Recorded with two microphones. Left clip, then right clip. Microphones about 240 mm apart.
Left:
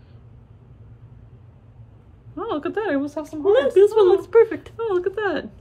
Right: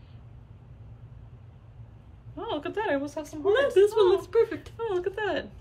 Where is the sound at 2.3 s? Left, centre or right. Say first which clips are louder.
Left 6 dB; centre.